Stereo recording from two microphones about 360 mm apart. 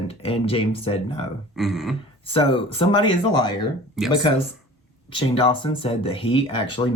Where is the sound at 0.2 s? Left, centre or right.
Centre.